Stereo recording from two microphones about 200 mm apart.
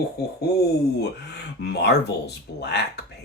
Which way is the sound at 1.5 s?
55° left (ahead or behind).